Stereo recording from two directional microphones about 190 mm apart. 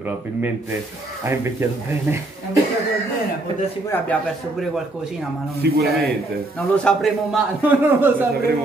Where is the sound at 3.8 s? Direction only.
10° left (ahead or behind).